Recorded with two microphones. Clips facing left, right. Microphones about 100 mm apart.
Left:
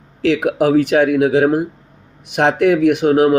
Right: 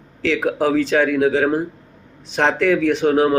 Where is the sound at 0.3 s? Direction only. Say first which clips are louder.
Left 4 dB; 20° left (ahead or behind).